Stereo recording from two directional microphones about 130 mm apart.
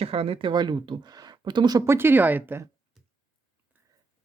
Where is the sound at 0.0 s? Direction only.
45° right (ahead or behind).